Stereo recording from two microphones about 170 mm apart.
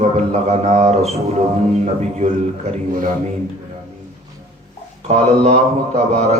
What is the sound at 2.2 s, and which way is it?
Speech, 45° right (ahead or behind).